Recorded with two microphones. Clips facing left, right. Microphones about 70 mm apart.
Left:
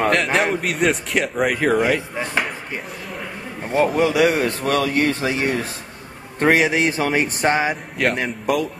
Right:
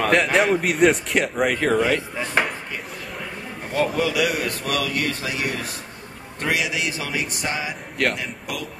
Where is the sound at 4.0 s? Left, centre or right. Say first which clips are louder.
Left 5 dB; left.